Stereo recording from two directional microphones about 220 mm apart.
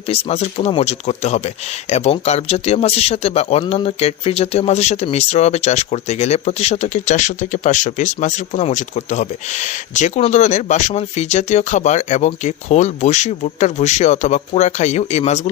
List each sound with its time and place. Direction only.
0.1 s speech: 30° left (ahead or behind)